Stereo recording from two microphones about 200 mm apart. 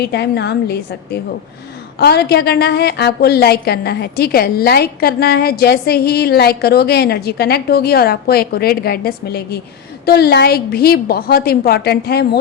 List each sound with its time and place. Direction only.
0.0 s a woman's voice: 55° left (ahead or behind)